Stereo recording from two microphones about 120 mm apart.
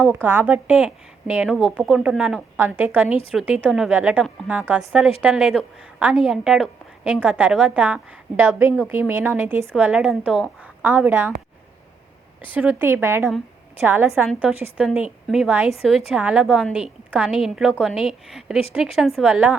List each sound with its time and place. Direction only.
0.1 s a woman's voice: 15° right (ahead or behind)
8.4 s a woman's voice: 20° right (ahead or behind)
9.7 s a woman's voice: 10° right (ahead or behind)
12.4 s a woman's voice: 15° right (ahead or behind)